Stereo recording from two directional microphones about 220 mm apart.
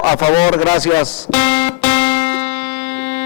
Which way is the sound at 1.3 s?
10° left (ahead or behind).